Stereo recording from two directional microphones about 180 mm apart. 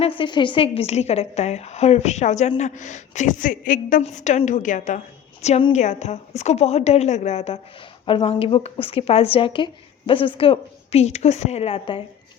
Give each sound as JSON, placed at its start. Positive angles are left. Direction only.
{"t": 0.0, "sound": "a woman's voice", "side_deg": 30}